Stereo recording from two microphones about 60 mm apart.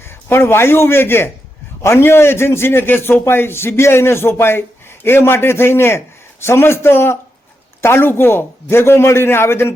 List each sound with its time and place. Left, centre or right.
0.0 s a man's voice: left